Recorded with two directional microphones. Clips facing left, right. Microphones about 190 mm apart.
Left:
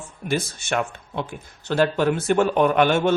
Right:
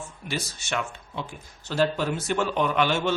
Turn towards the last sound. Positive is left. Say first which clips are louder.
# left 6 dB
turn(degrees=50)  # may be behind; listen again after turning